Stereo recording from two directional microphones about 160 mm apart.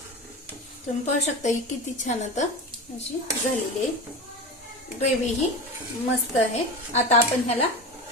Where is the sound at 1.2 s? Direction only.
50° left (ahead or behind).